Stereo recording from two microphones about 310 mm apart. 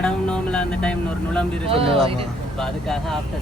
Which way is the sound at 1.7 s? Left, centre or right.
Centre.